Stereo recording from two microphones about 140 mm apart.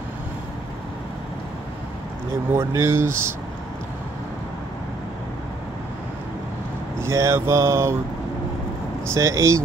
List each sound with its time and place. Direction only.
2.5 s speech: 20° right (ahead or behind)
7.0 s mantra: 20° right (ahead or behind)
9.1 s mantra: 20° right (ahead or behind)